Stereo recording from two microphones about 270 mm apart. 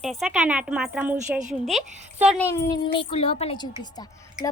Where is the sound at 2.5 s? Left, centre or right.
Centre.